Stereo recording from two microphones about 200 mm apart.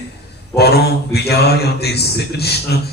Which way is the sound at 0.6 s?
55° left (ahead or behind).